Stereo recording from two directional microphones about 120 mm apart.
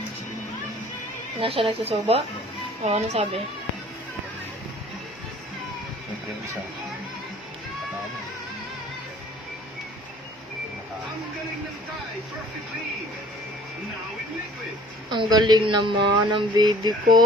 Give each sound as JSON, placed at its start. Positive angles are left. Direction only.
{"t": 1.4, "sound": "a woman's voice", "side_deg": -50}
{"t": 15.1, "sound": "speech", "side_deg": -40}